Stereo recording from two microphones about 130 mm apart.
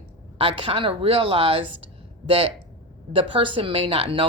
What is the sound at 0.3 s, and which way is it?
Speech, 45° right (ahead or behind).